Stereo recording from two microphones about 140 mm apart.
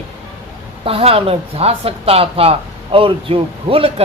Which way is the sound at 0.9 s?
45° right (ahead or behind).